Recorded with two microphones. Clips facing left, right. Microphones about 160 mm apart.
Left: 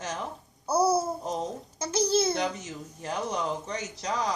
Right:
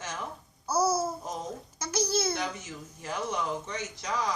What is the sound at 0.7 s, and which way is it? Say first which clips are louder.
Babbling: left 3 dB; 60° left (ahead or behind).